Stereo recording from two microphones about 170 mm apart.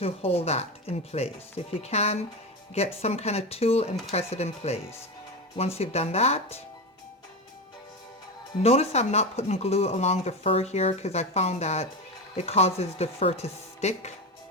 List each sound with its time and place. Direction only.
0.0 s speech: 35° left (ahead or behind)
8.6 s speech: 35° left (ahead or behind)